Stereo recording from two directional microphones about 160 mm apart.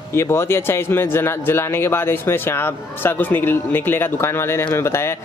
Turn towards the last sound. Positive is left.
turn(degrees=15)  # may be behind; listen again after turning